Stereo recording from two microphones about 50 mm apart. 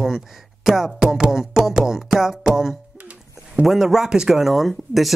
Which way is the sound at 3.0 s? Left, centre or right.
Right.